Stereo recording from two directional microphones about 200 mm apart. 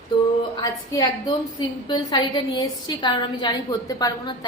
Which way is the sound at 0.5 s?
20° left (ahead or behind).